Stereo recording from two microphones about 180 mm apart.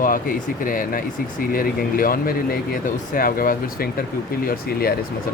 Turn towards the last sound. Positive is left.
turn(degrees=55)  # may be behind; listen again after turning